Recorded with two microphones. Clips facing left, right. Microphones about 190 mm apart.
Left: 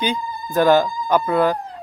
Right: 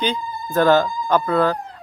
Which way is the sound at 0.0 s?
15° left (ahead or behind).